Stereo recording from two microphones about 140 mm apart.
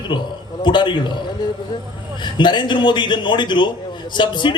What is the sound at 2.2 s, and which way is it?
A man's voice, 35° left (ahead or behind).